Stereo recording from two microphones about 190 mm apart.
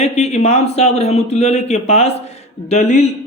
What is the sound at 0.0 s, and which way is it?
Speech, 35° left (ahead or behind).